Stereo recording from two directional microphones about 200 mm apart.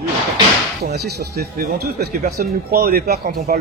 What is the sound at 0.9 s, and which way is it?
A man's voice, 55° right (ahead or behind).